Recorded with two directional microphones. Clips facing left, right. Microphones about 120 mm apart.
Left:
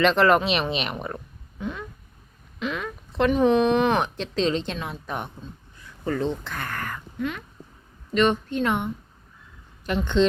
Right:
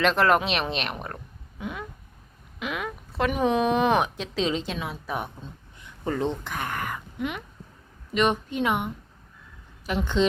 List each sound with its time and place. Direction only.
0.0 s speech: centre (ahead or behind)
1.5 s a sound: 10° right (ahead or behind)
2.6 s speech: 10° right (ahead or behind)
5.4 s speech: 20° right (ahead or behind)